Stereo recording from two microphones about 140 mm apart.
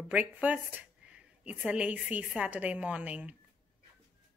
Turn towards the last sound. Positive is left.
turn(degrees=-10)  # may be behind; listen again after turning